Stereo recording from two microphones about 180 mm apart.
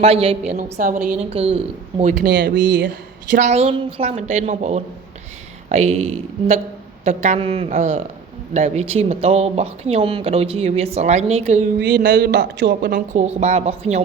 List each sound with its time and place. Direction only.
0.0 s speech: 35° right (ahead or behind)
0.8 s a woman's voice: 50° right (ahead or behind)
1.2 s speech: 35° right (ahead or behind)
2.2 s speech: 75° right (ahead or behind)
3.3 s speech: 40° right (ahead or behind)
11.8 s speech: 75° right (ahead or behind)
12.9 s speech: 40° right (ahead or behind)